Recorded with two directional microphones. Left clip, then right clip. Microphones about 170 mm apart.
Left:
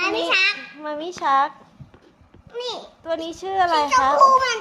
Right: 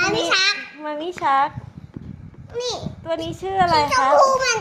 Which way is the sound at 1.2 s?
5° left (ahead or behind).